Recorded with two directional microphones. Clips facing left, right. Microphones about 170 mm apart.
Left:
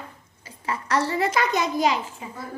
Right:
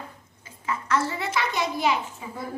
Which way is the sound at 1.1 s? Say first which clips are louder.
Left 5 dB; 40° left (ahead or behind).